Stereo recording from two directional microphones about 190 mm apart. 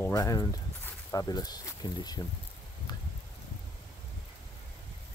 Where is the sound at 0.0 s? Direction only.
15° left (ahead or behind).